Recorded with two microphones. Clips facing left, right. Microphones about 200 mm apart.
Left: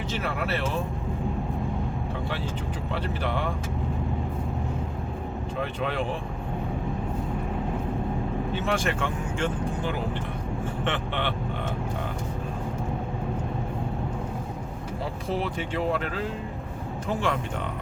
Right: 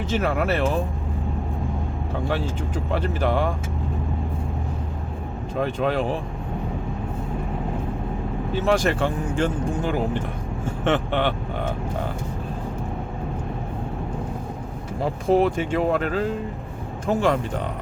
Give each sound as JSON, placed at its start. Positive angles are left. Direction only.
{"t": 0.1, "sound": "speech", "side_deg": -45}
{"t": 2.9, "sound": "speech", "side_deg": -45}
{"t": 5.5, "sound": "speech", "side_deg": -40}
{"t": 8.5, "sound": "speech", "side_deg": -40}
{"t": 15.0, "sound": "speech", "side_deg": -45}